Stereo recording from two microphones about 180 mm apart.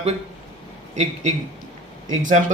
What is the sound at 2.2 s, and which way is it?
Speech, 45° right (ahead or behind).